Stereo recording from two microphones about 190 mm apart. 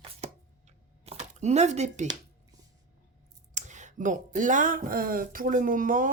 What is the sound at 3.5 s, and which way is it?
Speech, 40° right (ahead or behind).